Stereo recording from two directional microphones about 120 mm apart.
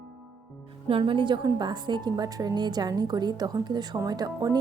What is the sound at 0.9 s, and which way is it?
A woman's voice, 45° right (ahead or behind).